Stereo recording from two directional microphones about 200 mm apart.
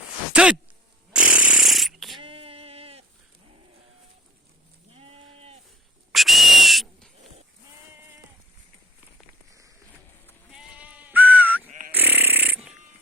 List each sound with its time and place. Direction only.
0.3 s speech: 5° right (ahead or behind)
1.1 s chainsaw: 5° right (ahead or behind)
2.1 s a sound: 25° right (ahead or behind)
4.9 s sheep: 30° right (ahead or behind)
6.1 s whistle: centre (ahead or behind)
10.5 s sheep: 5° right (ahead or behind)
11.9 s snoring: 10° right (ahead or behind)